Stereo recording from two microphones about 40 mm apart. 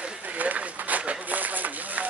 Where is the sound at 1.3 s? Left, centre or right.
Right.